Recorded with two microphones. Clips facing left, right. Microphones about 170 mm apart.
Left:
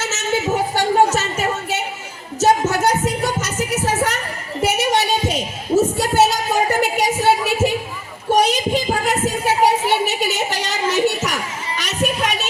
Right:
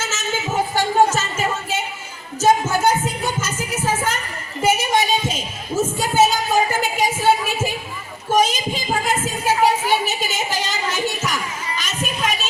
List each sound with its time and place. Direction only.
0.0 s music: 70° left (ahead or behind)
4.6 s a sound: 70° left (ahead or behind)
11.8 s music: 70° left (ahead or behind)